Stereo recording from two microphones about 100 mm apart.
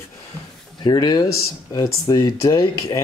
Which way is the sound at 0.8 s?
40° left (ahead or behind).